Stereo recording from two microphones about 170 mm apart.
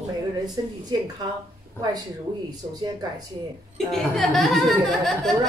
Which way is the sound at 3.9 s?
Centre (ahead or behind).